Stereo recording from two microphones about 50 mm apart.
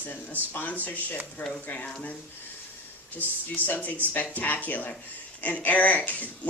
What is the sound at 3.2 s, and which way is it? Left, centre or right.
Speech, left.